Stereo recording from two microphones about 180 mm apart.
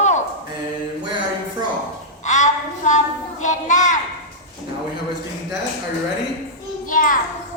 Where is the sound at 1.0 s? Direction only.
25° right (ahead or behind).